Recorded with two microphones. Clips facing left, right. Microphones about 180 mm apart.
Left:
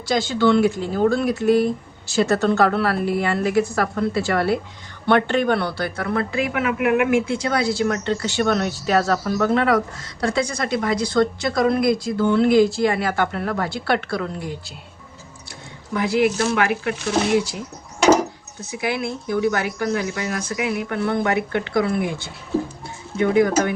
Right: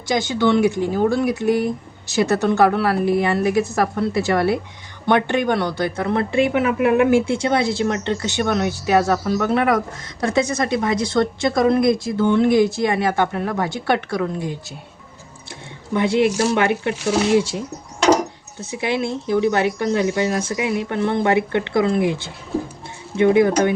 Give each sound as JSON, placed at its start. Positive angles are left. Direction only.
{"t": 0.0, "sound": "speech", "side_deg": -20}
{"t": 15.9, "sound": "speech", "side_deg": -25}
{"t": 18.8, "sound": "speech", "side_deg": -25}